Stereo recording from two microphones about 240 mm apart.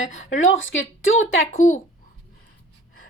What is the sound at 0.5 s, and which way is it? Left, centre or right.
Speech, left.